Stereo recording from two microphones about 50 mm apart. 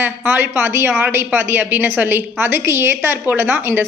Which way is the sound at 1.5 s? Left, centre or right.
Right.